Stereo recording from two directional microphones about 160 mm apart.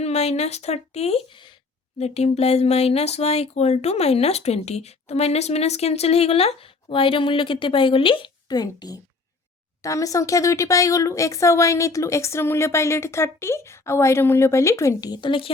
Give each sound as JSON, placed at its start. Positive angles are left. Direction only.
{"t": 0.0, "sound": "a woman's voice", "side_deg": 40}
{"t": 2.0, "sound": "speech", "side_deg": 40}